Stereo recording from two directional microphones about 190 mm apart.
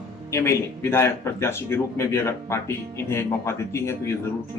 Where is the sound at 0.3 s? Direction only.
15° left (ahead or behind).